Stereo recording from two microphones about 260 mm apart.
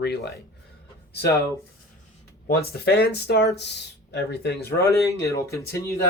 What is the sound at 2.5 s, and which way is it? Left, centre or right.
Speech, left.